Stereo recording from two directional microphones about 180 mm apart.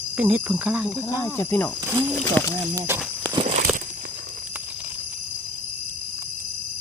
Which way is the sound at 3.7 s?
5° right (ahead or behind).